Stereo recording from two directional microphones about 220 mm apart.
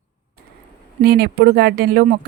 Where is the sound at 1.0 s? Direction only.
45° right (ahead or behind).